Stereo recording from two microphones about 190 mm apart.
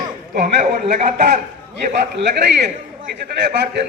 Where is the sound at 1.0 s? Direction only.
35° right (ahead or behind).